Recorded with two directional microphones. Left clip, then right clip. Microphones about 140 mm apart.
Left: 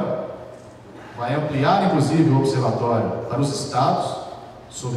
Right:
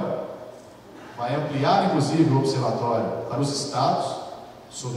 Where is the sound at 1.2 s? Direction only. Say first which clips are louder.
Left 3 dB; 35° right (ahead or behind).